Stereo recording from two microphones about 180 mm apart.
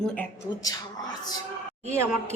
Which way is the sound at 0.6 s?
20° left (ahead or behind).